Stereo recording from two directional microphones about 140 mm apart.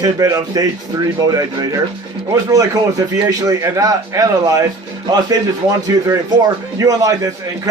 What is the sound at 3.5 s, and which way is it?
A man's voice, 25° right (ahead or behind).